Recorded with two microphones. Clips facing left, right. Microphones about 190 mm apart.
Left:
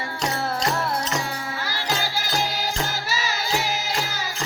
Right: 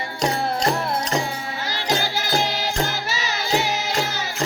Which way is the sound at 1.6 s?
20° right (ahead or behind).